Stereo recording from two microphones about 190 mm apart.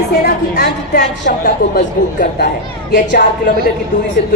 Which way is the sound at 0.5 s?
55° left (ahead or behind).